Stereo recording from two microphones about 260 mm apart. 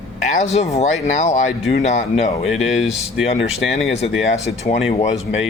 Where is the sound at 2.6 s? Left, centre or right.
Centre.